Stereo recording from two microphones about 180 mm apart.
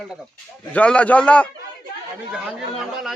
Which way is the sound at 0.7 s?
5° left (ahead or behind).